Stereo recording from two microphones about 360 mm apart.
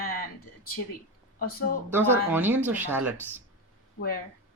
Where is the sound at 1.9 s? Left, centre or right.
Centre.